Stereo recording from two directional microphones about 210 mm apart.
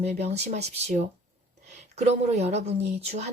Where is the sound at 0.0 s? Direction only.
30° right (ahead or behind).